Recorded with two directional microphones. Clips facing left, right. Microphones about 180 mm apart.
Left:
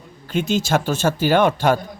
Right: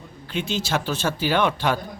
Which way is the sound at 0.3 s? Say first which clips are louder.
Left 6 dB; 45° left (ahead or behind).